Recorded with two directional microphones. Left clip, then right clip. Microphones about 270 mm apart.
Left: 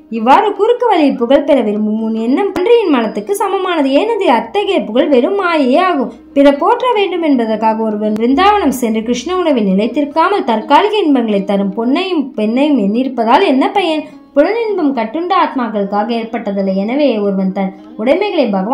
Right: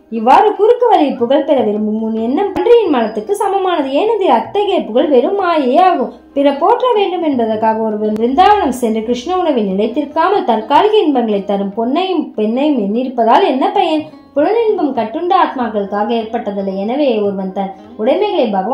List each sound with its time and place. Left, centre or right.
0.2 s speech: left
17.6 s speech: left